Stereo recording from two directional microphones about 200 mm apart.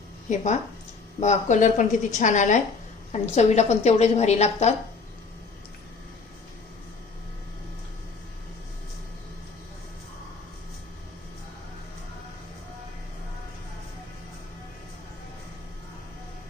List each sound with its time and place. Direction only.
0.3 s a woman's voice: 40° left (ahead or behind)